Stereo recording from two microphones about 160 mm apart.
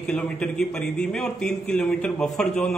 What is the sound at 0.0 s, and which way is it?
A man's voice, 5° left (ahead or behind).